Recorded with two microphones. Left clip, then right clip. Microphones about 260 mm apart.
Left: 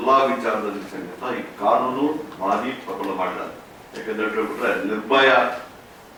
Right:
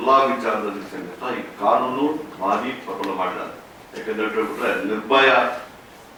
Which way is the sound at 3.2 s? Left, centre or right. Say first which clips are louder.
Right 1 dB; centre.